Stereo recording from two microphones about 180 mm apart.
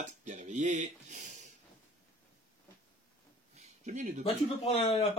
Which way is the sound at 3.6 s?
40° right (ahead or behind).